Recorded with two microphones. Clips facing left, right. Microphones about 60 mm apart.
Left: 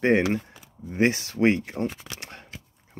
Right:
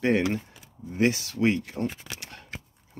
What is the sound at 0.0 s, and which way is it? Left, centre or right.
Speech, left.